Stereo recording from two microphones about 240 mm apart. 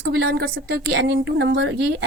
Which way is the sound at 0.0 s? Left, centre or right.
Right.